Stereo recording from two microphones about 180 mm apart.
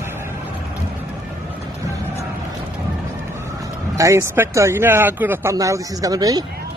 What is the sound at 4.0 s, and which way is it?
Speech, 15° right (ahead or behind).